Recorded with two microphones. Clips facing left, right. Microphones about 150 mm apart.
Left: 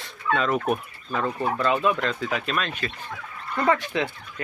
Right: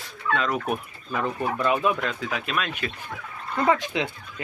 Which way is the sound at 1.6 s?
15° right (ahead or behind).